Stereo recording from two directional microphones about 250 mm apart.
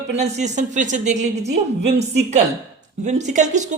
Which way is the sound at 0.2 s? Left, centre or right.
Right.